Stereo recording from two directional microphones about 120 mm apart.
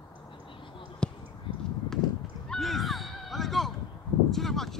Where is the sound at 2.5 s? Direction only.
Centre (ahead or behind).